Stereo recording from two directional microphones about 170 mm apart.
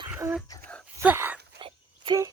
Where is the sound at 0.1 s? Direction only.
10° right (ahead or behind).